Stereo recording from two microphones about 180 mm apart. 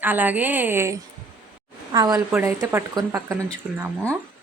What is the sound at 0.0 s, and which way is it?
A woman's voice, 10° right (ahead or behind).